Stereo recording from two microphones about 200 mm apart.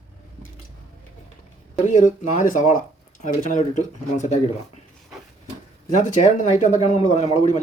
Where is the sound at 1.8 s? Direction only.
35° left (ahead or behind).